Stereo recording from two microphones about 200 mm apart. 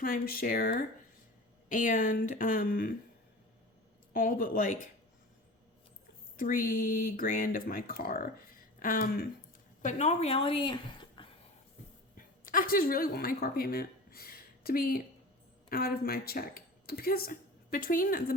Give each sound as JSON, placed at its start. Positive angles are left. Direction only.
{"t": 0.0, "sound": "speech", "side_deg": 45}
{"t": 4.1, "sound": "speech", "side_deg": 45}
{"t": 6.3, "sound": "speech", "side_deg": 45}
{"t": 9.8, "sound": "a woman's voice", "side_deg": 35}
{"t": 12.1, "sound": "a woman's voice", "side_deg": 45}